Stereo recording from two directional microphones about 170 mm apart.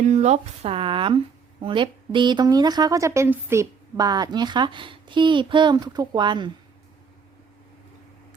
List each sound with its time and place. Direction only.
0.0 s speech: 40° right (ahead or behind); by 6.5 s 25° right (ahead or behind)